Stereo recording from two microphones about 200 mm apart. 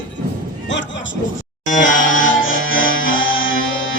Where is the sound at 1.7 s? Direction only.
40° left (ahead or behind).